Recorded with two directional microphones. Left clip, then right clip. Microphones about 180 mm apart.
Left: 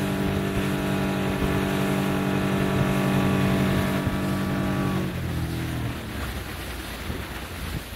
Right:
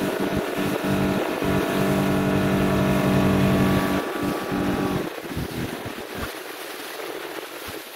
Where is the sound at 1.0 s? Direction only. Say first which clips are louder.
Right 3 dB; 5° left (ahead or behind).